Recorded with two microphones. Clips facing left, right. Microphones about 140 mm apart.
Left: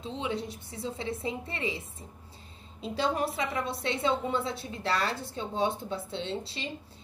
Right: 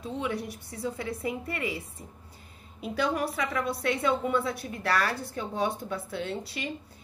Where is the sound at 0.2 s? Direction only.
25° left (ahead or behind).